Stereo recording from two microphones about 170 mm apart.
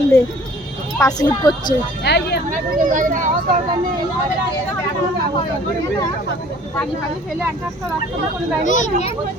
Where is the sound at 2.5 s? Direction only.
50° right (ahead or behind).